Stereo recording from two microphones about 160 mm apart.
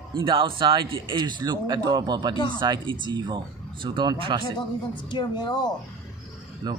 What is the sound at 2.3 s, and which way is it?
Speech, 25° left (ahead or behind).